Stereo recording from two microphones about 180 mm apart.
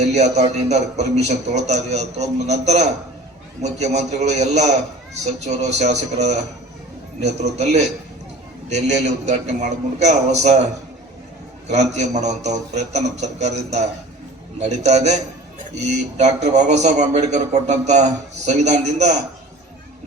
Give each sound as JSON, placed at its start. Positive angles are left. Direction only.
{"t": 0.0, "sound": "a man's voice", "side_deg": -40}
{"t": 7.5, "sound": "a man's voice", "side_deg": -40}
{"t": 11.7, "sound": "a man's voice", "side_deg": -40}
{"t": 14.8, "sound": "a man's voice", "side_deg": -40}